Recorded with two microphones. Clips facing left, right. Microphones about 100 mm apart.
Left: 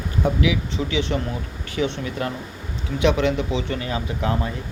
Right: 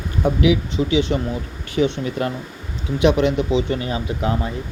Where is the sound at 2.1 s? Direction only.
30° right (ahead or behind).